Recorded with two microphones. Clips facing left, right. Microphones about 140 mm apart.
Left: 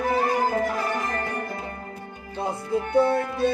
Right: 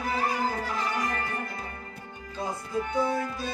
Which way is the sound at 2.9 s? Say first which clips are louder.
Left 8 dB; 65° left (ahead or behind).